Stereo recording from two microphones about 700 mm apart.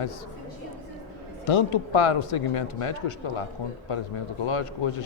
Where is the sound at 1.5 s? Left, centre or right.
Left.